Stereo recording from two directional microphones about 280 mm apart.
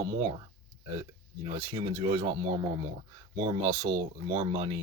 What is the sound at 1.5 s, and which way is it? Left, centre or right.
Speech, centre.